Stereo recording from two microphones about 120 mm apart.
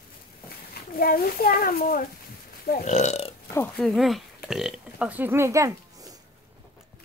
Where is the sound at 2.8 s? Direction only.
75° left (ahead or behind).